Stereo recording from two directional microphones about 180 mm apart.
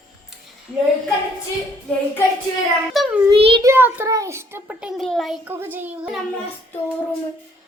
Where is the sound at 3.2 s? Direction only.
30° right (ahead or behind).